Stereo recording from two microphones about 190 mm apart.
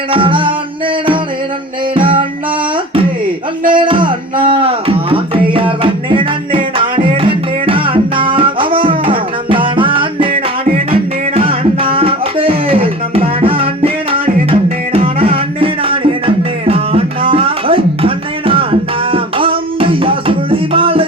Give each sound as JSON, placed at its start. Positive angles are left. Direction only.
{"t": 0.1, "sound": "music", "side_deg": -25}
{"t": 2.0, "sound": "music", "side_deg": -25}
{"t": 3.8, "sound": "music", "side_deg": -25}